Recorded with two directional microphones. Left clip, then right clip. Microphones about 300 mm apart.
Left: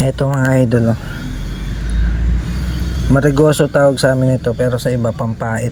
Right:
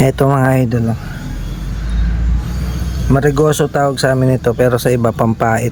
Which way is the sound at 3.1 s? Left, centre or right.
Centre.